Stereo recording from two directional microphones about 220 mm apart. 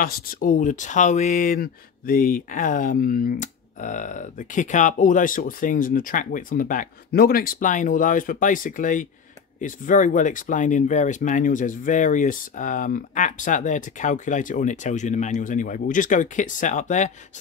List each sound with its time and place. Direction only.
0.0 s speech: 40° left (ahead or behind)